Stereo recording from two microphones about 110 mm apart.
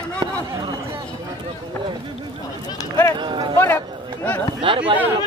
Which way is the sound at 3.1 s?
45° right (ahead or behind).